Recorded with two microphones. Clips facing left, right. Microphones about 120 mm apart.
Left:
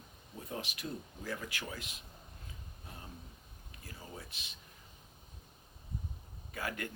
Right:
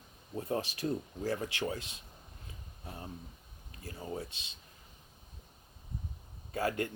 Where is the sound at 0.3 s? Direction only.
35° right (ahead or behind).